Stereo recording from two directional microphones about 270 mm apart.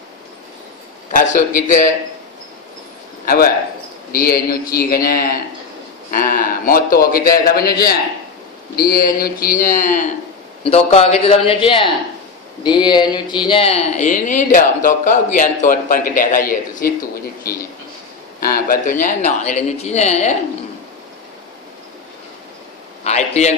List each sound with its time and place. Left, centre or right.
1.1 s speech: left
3.3 s a man's voice: left
18.4 s speech: left
23.0 s speech: left